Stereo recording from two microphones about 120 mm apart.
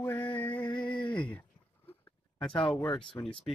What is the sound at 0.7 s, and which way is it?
Speech, 40° left (ahead or behind).